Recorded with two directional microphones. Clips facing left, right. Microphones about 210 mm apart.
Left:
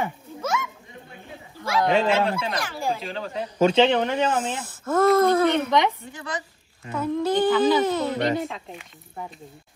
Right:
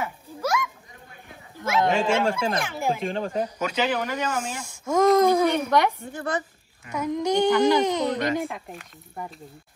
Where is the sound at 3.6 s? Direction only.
25° left (ahead or behind).